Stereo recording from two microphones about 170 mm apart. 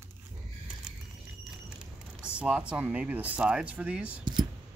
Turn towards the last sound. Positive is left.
turn(degrees=-5)  # may be behind; listen again after turning